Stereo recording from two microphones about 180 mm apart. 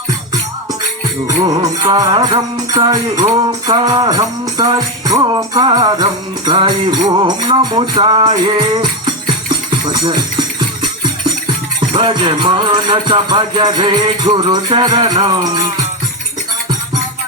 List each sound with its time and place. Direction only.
1.3 s music: 20° right (ahead or behind)
9.6 s speech: 25° right (ahead or behind)
11.9 s music: 25° right (ahead or behind)